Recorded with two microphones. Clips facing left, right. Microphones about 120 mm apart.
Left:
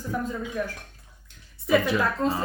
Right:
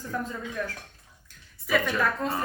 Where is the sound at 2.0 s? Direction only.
25° left (ahead or behind).